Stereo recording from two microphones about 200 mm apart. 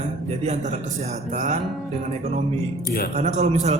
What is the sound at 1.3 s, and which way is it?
Speech, 35° right (ahead or behind).